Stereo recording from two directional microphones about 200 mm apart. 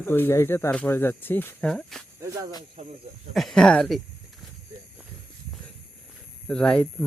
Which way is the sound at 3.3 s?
Centre (ahead or behind).